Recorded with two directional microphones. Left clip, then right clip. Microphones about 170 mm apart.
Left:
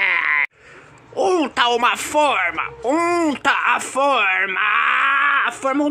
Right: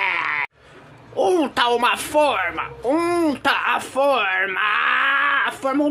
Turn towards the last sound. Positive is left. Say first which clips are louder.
# left 2 dB
turn(degrees=15)  # may be behind; listen again after turning